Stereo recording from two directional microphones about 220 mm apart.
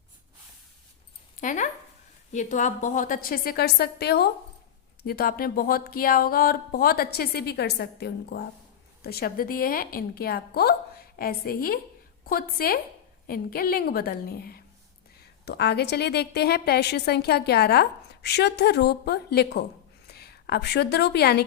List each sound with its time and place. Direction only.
1.4 s a woman's voice: 35° left (ahead or behind)